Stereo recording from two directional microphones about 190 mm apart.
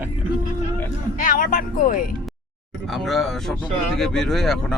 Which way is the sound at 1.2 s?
45° left (ahead or behind).